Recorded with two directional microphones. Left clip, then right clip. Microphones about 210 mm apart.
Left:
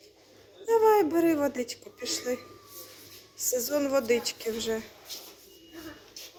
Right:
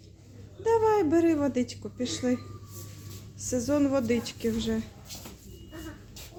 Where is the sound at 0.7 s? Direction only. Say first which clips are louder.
Left 1 dB; 5° right (ahead or behind).